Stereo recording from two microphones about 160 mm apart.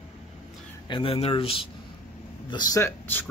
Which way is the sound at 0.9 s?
35° left (ahead or behind).